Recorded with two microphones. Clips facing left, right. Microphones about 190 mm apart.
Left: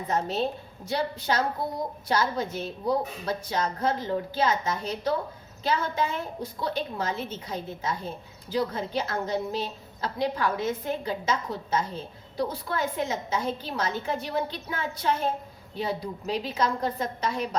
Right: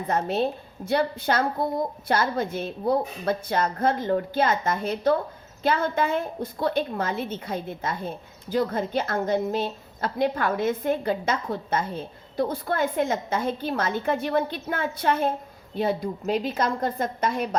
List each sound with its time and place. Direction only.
0.1 s a woman's voice: 55° right (ahead or behind)